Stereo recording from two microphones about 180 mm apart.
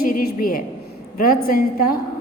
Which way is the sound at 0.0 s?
50° left (ahead or behind).